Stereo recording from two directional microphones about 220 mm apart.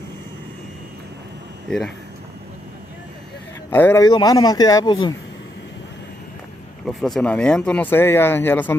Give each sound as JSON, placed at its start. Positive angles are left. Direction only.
{"t": 3.7, "sound": "speech", "side_deg": 10}
{"t": 6.9, "sound": "speech", "side_deg": 0}